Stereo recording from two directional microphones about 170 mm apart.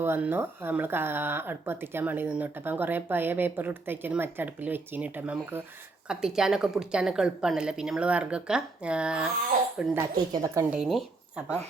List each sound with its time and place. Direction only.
0.0 s a woman's voice: 10° right (ahead or behind)
10.3 s a woman's voice: 20° right (ahead or behind)
10.7 s speech: centre (ahead or behind)